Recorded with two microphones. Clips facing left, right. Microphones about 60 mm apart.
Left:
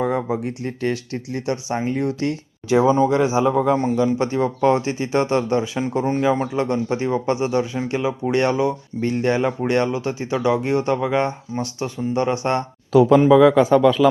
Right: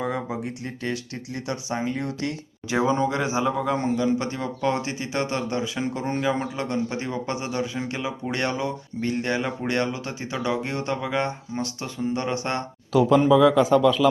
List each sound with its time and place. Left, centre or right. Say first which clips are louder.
0.0 s a sound: left 6 dB; left
0.4 s speech: left 7 dB; left
2.9 s speech: left 6 dB; centre
3.6 s speech: left 6 dB; centre
3.9 s speech: left 5 dB; left
6.1 s speech: left 5 dB; centre; by 14.1 s left